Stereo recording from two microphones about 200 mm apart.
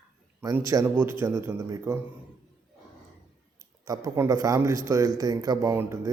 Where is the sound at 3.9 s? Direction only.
15° right (ahead or behind).